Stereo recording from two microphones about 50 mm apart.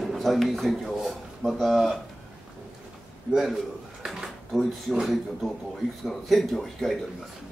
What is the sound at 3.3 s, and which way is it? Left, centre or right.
Speech, centre.